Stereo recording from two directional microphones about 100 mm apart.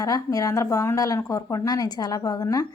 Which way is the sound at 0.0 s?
35° left (ahead or behind).